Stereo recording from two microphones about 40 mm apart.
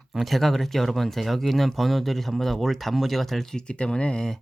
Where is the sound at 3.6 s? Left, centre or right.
Left.